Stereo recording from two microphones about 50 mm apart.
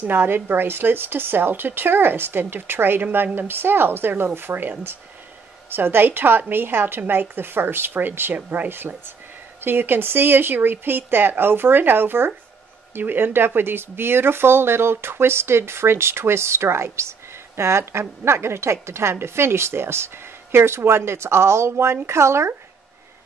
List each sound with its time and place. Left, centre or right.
0.0 s a woman's voice: right